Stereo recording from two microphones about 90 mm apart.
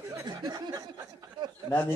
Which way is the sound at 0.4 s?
55° right (ahead or behind).